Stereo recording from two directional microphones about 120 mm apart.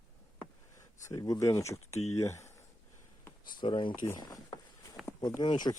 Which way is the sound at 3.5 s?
40° left (ahead or behind).